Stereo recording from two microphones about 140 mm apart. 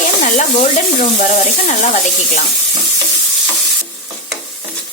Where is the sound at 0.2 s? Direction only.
60° left (ahead or behind).